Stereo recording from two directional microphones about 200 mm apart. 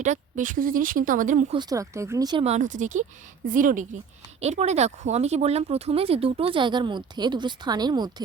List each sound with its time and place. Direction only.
0.0 s speech: 40° right (ahead or behind)
1.5 s speech: 15° right (ahead or behind)
2.4 s speech: 35° right (ahead or behind)